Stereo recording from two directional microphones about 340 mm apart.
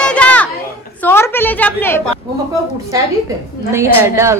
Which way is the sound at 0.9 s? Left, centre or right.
Centre.